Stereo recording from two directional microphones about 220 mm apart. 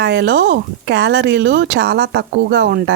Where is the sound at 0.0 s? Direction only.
50° right (ahead or behind).